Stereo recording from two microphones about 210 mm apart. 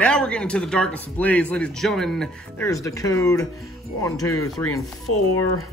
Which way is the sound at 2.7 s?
15° left (ahead or behind).